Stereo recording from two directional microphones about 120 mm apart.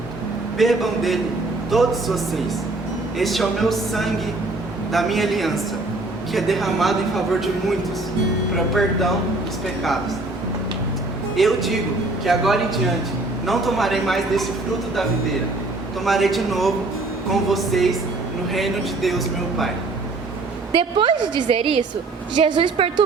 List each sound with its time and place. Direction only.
0.6 s speech: centre (ahead or behind)
8.5 s speech: centre (ahead or behind)
11.3 s speech: centre (ahead or behind)
16.0 s speech: centre (ahead or behind)
20.7 s a woman's voice: 45° right (ahead or behind)